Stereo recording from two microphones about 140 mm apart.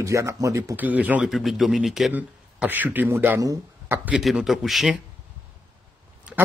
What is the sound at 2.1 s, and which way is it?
Speech, 10° right (ahead or behind).